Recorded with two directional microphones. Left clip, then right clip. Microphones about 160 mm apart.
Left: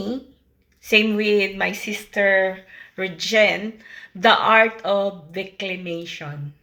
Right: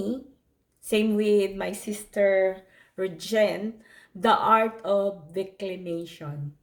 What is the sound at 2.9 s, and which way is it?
Speech, 40° right (ahead or behind).